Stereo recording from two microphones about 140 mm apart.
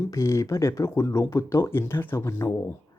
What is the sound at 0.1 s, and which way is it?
Speech, 20° left (ahead or behind).